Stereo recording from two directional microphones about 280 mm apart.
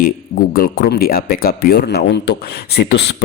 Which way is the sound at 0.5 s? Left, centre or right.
Left.